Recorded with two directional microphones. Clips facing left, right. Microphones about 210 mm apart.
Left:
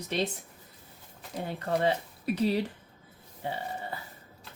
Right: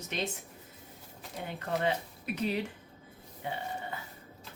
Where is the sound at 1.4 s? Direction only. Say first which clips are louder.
Left 4 dB; 35° left (ahead or behind).